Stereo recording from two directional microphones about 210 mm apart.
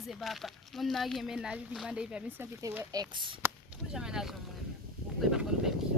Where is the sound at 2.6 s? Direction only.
15° right (ahead or behind).